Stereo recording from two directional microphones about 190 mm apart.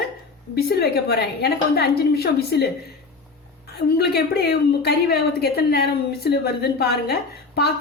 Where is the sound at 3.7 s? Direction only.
55° left (ahead or behind).